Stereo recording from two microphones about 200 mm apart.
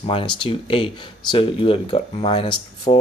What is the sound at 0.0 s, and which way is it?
Speech, 25° left (ahead or behind).